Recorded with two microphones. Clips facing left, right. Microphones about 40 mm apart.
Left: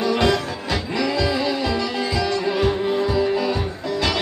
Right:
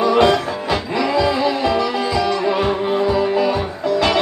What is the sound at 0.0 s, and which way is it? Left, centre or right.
Music, centre.